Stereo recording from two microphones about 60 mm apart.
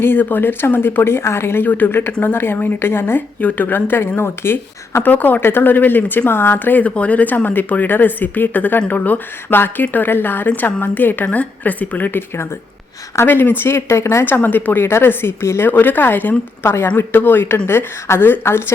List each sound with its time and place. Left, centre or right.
0.0 s a woman's voice: left
5.0 s speech: left
13.2 s a woman's voice: left
14.3 s speech: left
15.7 s a woman's voice: left